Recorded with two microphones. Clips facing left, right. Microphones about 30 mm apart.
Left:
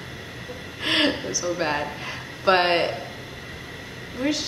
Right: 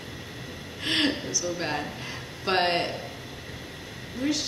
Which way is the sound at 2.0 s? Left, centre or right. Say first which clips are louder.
Left 8 dB; centre.